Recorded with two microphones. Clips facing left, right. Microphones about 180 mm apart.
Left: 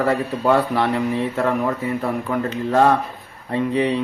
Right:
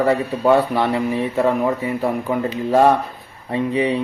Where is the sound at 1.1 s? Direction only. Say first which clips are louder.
Right 2 dB; 5° right (ahead or behind).